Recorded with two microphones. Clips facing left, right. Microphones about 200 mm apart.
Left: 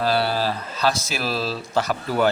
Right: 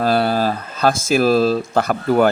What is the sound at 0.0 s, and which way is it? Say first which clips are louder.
Speech: right 5 dB; 50° right (ahead or behind).